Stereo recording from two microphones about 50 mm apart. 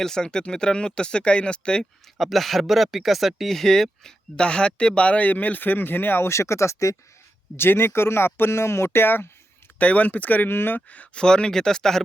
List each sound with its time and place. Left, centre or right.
0.0 s speech: centre
1.8 s speech: centre
4.4 s speech: left
7.5 s speech: left
9.7 s speech: left
10.8 s speech: left
11.2 s speech: centre